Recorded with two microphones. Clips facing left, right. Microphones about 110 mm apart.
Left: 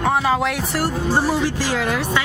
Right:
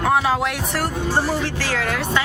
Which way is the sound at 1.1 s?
15° left (ahead or behind).